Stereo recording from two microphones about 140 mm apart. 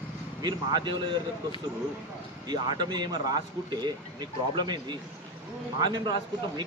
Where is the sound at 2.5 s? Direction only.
30° right (ahead or behind).